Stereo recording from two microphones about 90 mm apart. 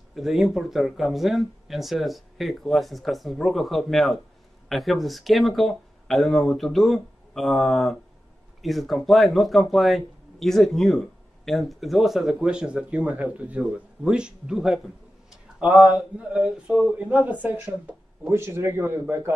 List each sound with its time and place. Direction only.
0.1 s speech: 5° right (ahead or behind)
15.6 s a sound: 10° right (ahead or behind)
18.3 s a man's voice: 30° right (ahead or behind)